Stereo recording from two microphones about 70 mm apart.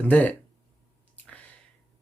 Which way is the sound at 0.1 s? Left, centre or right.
Left.